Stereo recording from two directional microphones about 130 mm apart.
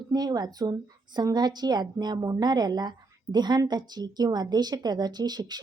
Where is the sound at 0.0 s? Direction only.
30° right (ahead or behind).